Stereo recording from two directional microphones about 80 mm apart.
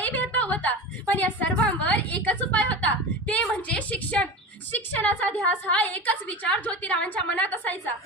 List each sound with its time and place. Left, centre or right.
0.0 s a woman's voice: left